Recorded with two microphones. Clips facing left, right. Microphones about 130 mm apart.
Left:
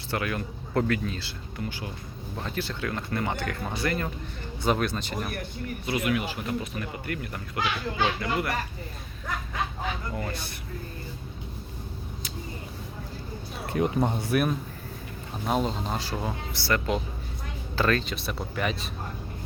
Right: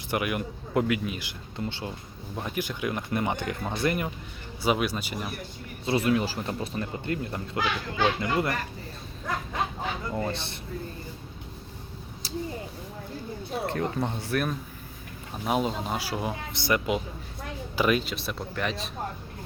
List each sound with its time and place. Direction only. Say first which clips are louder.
0.1 s a man's voice: right 2 dB; 15° right (ahead or behind)
2.3 s a man's voice: right 1 dB; 15° right (ahead or behind)
3.6 s speech: right 1 dB; centre (ahead or behind)
3.8 s a man's voice: right 2 dB; 15° right (ahead or behind)
5.8 s speech: right 3 dB; 30° right (ahead or behind)
10.2 s speech: right 3 dB; 25° right (ahead or behind)
13.7 s speech: left 5 dB; 15° left (ahead or behind)
15.4 s a man's voice: even; 5° right (ahead or behind)
18.1 s speech: left 1 dB; centre (ahead or behind)